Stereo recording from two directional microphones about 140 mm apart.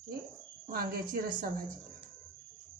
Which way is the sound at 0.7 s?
90° right.